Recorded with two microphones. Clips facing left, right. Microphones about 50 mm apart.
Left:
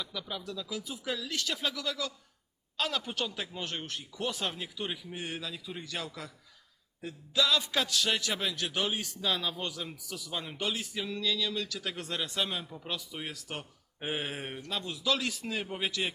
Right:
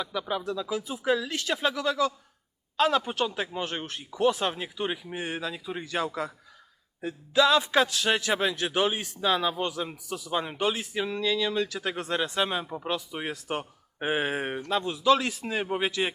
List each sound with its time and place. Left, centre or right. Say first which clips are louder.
0.0 s a man's voice: right 8 dB; right
12.9 s a man's voice: right 6 dB; right